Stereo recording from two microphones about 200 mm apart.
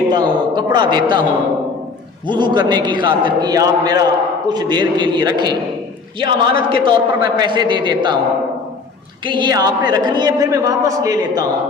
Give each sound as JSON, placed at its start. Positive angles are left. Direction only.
{"t": 0.1, "sound": "a man's voice", "side_deg": -20}
{"t": 2.2, "sound": "a man's voice", "side_deg": -20}
{"t": 9.2, "sound": "a man's voice", "side_deg": -25}